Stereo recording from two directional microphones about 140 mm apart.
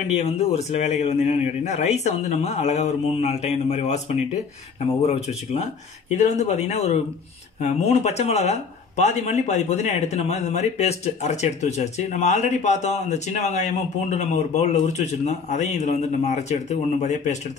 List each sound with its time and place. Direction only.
0.6 s speech: 50° left (ahead or behind)
6.0 s speech: 55° left (ahead or behind)